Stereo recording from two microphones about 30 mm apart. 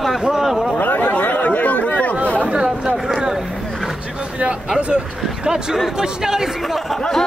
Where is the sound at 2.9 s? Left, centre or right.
Centre.